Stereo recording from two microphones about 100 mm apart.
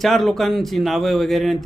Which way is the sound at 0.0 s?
Centre (ahead or behind).